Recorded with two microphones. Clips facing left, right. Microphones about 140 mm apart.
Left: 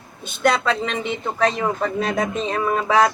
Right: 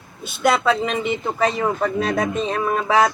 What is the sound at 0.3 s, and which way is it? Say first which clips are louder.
Speech: right 1 dB; 5° right (ahead or behind).